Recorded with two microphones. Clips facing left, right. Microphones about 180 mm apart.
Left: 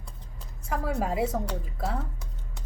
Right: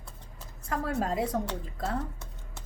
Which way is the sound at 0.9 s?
5° left (ahead or behind).